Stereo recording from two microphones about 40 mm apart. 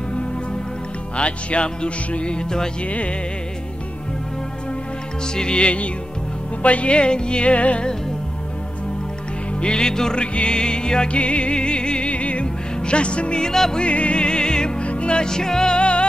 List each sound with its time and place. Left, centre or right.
1.1 s music: left
2.8 s music: left
5.2 s music: centre
9.6 s music: centre
10.1 s music: left
13.5 s music: centre
13.7 s music: left
15.2 s music: centre